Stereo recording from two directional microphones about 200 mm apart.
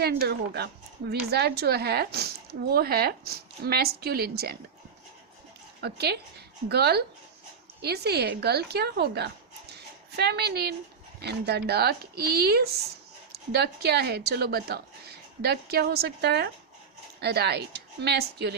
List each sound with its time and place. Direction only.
0.0 s a woman's voice: 50° right (ahead or behind)
5.8 s a woman's voice: 55° right (ahead or behind)
9.7 s a sound: 55° right (ahead or behind)
11.2 s a woman's voice: 55° right (ahead or behind)